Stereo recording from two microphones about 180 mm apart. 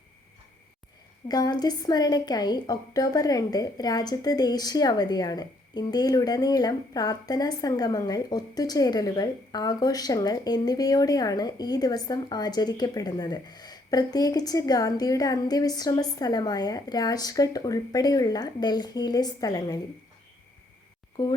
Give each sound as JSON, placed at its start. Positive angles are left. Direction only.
{"t": 1.3, "sound": "a woman's voice", "side_deg": 20}